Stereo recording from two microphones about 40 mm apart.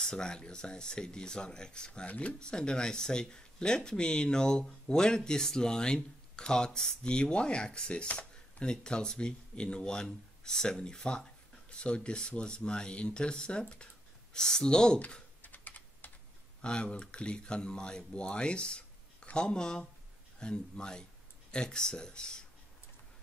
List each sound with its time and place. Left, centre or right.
0.0 s speech: centre
2.0 s speech: left
2.4 s speech: left
15.4 s typing: left
16.6 s speech: left